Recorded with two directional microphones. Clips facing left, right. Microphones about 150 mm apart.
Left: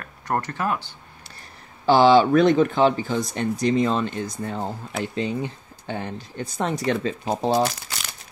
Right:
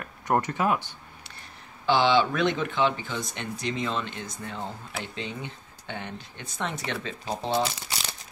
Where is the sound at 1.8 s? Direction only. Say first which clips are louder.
Left 7 dB; 40° left (ahead or behind).